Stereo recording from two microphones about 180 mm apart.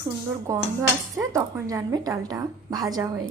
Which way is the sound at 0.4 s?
15° right (ahead or behind).